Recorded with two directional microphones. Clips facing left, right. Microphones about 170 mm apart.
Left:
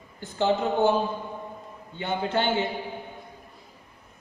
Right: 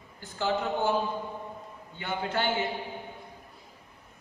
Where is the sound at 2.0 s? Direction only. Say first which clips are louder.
Left 4 dB; 25° left (ahead or behind).